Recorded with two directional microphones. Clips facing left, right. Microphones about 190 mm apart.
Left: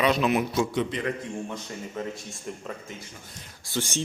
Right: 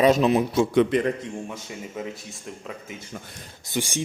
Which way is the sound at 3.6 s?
15° right (ahead or behind).